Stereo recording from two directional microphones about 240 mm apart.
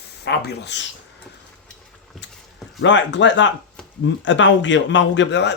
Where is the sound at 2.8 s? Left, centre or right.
Left.